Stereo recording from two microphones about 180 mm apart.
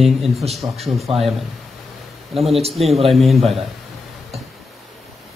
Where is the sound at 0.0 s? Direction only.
Centre (ahead or behind).